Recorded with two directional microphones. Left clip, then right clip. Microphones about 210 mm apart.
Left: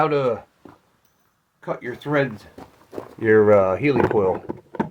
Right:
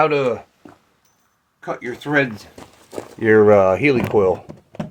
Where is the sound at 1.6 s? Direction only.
15° right (ahead or behind).